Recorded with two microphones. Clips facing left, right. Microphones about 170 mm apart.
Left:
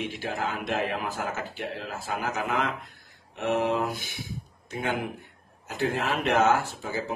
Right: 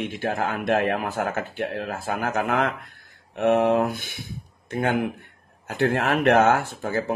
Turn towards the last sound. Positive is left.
turn(degrees=-55)  # may be behind; listen again after turning